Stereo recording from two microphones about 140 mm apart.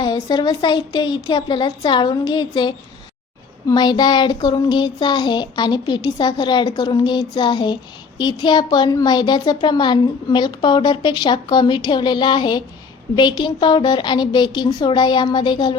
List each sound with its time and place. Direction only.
0.0 s a woman's voice: 30° left (ahead or behind)